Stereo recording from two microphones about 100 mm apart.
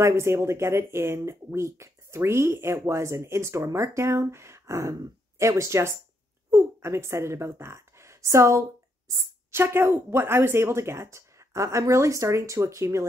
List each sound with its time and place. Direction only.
0.0 s a woman's voice: 30° right (ahead or behind)